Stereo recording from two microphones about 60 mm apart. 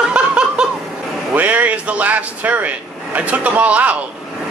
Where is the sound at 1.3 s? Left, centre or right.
Right.